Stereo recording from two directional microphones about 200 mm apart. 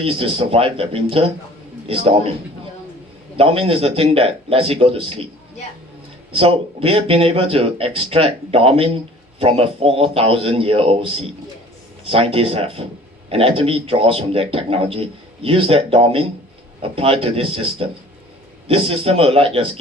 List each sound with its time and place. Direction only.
0.0 s speech: 30° right (ahead or behind)
3.3 s speech: 30° right (ahead or behind)
6.3 s speech: 25° right (ahead or behind)